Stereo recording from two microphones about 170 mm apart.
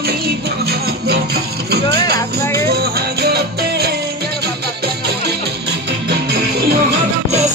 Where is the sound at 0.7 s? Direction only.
70° right (ahead or behind).